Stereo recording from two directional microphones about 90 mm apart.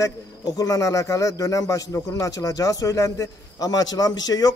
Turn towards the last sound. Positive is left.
turn(degrees=45)  # may be behind; listen again after turning